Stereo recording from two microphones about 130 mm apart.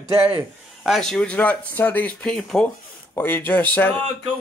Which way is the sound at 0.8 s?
Centre (ahead or behind).